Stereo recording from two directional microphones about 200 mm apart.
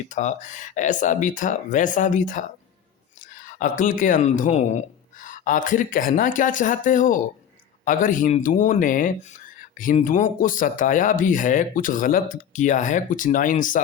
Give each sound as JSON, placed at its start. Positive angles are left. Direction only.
{"t": 0.1, "sound": "speech", "side_deg": 35}